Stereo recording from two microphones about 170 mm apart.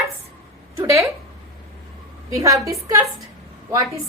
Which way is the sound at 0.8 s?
15° right (ahead or behind).